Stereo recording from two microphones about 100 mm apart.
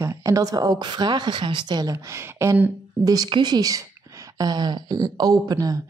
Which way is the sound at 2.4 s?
25° right (ahead or behind).